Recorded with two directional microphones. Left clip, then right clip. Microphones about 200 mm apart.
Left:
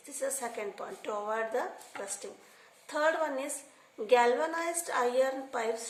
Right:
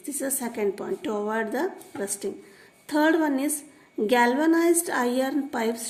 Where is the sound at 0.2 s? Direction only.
45° right (ahead or behind).